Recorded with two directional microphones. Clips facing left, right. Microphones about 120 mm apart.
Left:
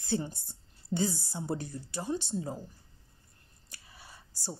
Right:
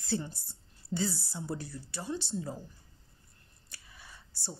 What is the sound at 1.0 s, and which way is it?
Speech, 45° left (ahead or behind).